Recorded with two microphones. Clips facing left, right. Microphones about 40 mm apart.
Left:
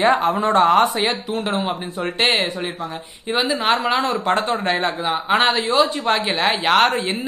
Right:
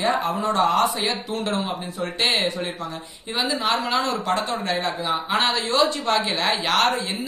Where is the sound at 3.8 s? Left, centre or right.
Left.